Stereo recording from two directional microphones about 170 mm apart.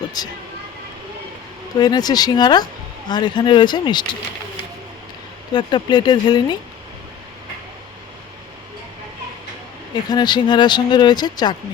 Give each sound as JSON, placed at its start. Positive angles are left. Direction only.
{"t": 0.2, "sound": "speech", "side_deg": 25}
{"t": 1.8, "sound": "speech", "side_deg": 25}
{"t": 5.5, "sound": "speech", "side_deg": 25}
{"t": 9.9, "sound": "speech", "side_deg": 25}